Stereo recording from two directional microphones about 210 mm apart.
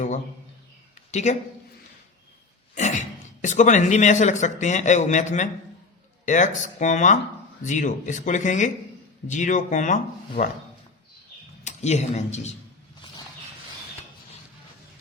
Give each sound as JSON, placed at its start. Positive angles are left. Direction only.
{"t": 1.1, "sound": "speech", "side_deg": 35}
{"t": 2.7, "sound": "cough", "side_deg": 35}
{"t": 3.4, "sound": "a man's voice", "side_deg": 35}
{"t": 11.6, "sound": "speech", "side_deg": 35}